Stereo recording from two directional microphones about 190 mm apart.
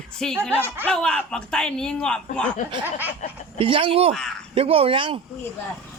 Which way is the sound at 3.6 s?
30° right (ahead or behind).